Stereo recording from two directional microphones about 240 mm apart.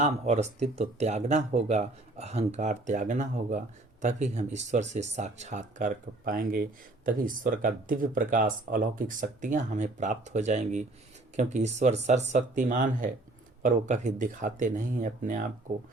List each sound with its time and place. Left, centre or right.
0.0 s speech: right